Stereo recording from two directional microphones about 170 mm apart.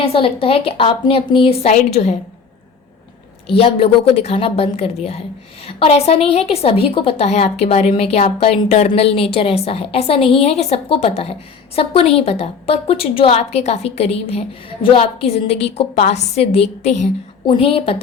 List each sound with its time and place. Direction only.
0.0 s a woman's voice: 35° left (ahead or behind)
1.6 s a woman's voice: 45° left (ahead or behind)
3.5 s a woman's voice: 35° left (ahead or behind)